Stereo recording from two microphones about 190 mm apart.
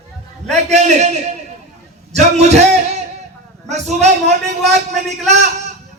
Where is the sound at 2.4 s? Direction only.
35° right (ahead or behind).